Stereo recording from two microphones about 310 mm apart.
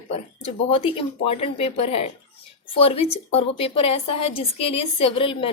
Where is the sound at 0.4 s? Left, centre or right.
Centre.